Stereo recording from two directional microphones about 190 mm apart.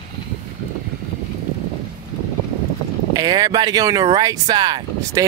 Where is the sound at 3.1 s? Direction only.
20° right (ahead or behind).